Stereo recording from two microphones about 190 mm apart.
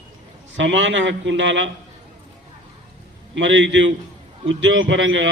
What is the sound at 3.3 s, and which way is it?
Speech, 75° right (ahead or behind).